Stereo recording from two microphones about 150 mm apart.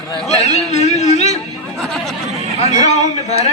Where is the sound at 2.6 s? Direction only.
50° left (ahead or behind).